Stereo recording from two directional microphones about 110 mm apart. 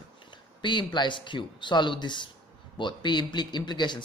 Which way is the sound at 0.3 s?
45° left (ahead or behind).